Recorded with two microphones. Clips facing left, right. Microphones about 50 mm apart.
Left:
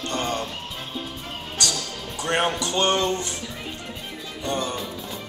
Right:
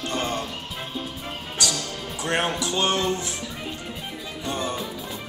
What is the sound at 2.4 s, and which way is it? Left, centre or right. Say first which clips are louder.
Speech: left 2 dB; centre.